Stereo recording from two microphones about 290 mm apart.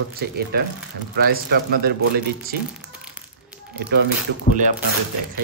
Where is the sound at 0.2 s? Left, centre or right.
Right.